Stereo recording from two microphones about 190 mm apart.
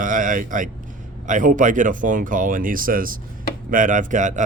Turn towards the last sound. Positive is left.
turn(degrees=-40)  # may be behind; listen again after turning